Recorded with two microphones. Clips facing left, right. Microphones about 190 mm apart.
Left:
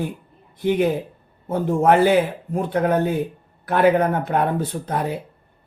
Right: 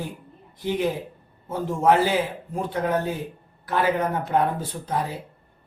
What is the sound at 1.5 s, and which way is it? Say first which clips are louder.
A man's voice: left 3 dB; 60° left (ahead or behind).